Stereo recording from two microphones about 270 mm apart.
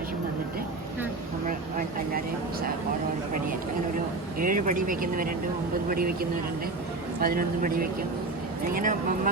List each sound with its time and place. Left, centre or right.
4.4 s speech: right